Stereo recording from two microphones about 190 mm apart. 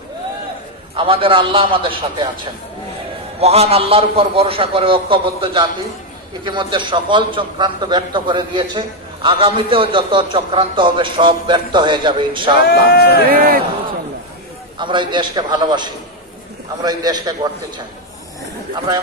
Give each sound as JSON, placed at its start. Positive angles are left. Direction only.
{"t": 0.9, "sound": "a man's voice", "side_deg": -30}
{"t": 3.3, "sound": "a man's voice", "side_deg": -30}
{"t": 12.6, "sound": "speech", "side_deg": 55}
{"t": 13.2, "sound": "speech", "side_deg": -50}
{"t": 14.8, "sound": "a man's voice", "side_deg": -25}